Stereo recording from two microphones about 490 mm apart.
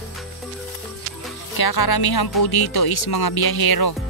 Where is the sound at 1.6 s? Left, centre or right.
Left.